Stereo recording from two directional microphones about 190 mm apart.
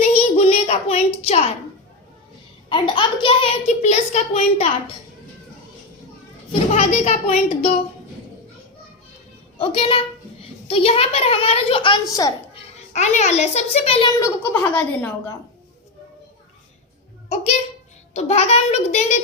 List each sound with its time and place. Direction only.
0.0 s a sound: 35° left (ahead or behind)
2.6 s a child's voice: 25° left (ahead or behind)
6.5 s a child's voice: 35° left (ahead or behind)
9.6 s a child's voice: 30° left (ahead or behind)
14.1 s a woman's voice: 15° left (ahead or behind)
17.2 s a sound: 35° left (ahead or behind)
18.1 s a child's voice: 35° left (ahead or behind)